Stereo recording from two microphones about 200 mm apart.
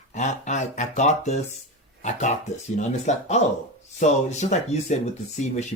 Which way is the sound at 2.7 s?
35° left (ahead or behind).